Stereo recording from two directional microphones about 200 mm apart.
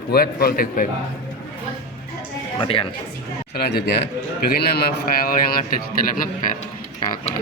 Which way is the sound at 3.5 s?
55° left (ahead or behind).